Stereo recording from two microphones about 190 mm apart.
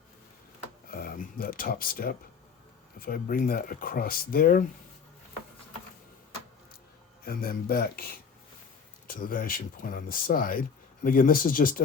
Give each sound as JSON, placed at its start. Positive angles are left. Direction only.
{"t": 0.9, "sound": "speech", "side_deg": 50}
{"t": 7.3, "sound": "speech", "side_deg": 50}